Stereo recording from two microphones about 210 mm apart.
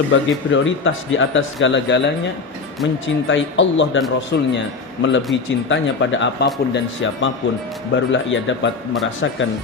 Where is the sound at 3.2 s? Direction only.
60° left (ahead or behind).